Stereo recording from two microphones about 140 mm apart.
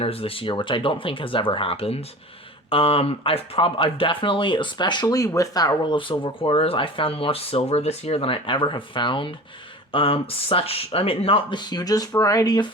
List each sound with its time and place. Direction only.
0.0 s speech: 45° left (ahead or behind); by 12.6 s 25° left (ahead or behind)